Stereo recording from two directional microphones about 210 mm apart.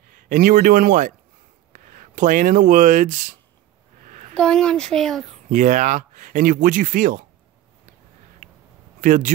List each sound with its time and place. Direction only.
0.1 s speech: 40° right (ahead or behind)
4.0 s a sound: 40° right (ahead or behind)
4.3 s speech: 5° left (ahead or behind)
5.5 s speech: 35° right (ahead or behind)
9.0 s speech: 40° right (ahead or behind)